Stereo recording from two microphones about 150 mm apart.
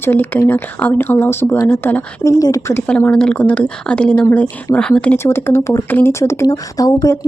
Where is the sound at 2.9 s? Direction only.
5° left (ahead or behind).